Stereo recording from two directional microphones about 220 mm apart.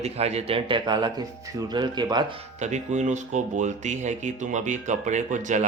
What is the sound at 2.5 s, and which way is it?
Speech, 30° right (ahead or behind).